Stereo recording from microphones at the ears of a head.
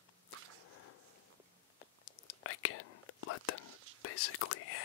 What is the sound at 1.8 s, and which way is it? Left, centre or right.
Whispering, left.